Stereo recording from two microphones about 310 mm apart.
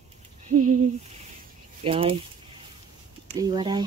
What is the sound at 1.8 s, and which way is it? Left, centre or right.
Speech, centre.